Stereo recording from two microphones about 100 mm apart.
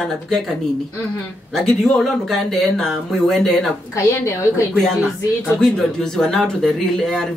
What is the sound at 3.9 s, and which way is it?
Speech, 30° left (ahead or behind).